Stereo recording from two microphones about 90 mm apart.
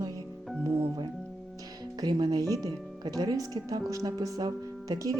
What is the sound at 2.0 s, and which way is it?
Speech, 50° right (ahead or behind).